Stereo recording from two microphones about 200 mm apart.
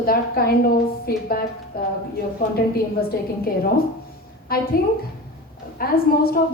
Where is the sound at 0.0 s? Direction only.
50° left (ahead or behind).